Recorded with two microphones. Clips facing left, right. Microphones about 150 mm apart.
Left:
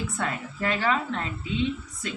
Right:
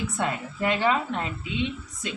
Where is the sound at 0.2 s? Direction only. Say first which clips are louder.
Right 3 dB; 20° right (ahead or behind).